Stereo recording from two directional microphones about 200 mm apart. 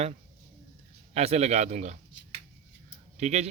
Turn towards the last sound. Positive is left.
turn(degrees=-35)  # may be behind; listen again after turning